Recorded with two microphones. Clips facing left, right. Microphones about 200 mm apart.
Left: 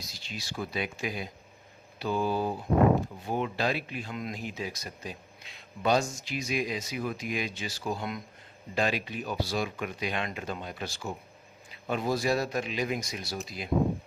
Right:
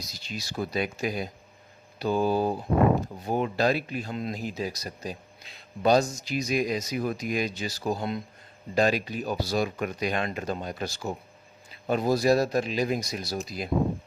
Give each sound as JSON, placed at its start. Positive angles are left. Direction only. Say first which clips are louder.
{"t": 0.0, "sound": "speech", "louder": "right 4 dB", "side_deg": -40}